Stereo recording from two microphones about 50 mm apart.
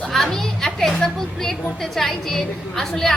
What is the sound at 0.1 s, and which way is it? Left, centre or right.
A child's voice, centre.